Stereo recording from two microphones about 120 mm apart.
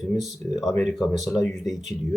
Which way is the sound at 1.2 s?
Centre (ahead or behind).